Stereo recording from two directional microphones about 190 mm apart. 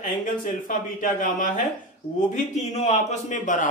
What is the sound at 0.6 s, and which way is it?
A man's voice, 45° left (ahead or behind).